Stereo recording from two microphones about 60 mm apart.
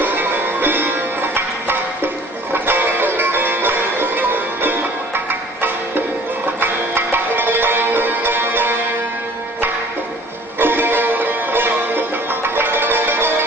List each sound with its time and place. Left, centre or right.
0.0 s sitar: right
2.5 s music: right
10.6 s music: right